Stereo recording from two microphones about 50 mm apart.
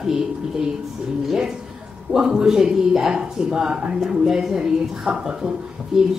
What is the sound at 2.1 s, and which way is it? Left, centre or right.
Speech, centre.